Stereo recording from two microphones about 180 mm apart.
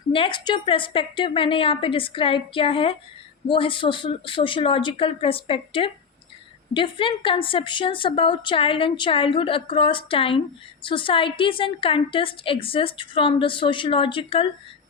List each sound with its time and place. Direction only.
0.1 s a woman's voice: 30° left (ahead or behind)